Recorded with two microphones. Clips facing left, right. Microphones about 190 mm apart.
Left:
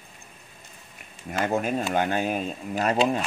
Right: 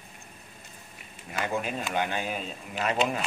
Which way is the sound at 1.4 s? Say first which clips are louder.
Left 5 dB; 45° left (ahead or behind).